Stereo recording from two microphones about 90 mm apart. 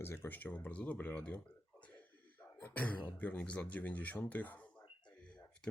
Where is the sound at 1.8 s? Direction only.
20° left (ahead or behind).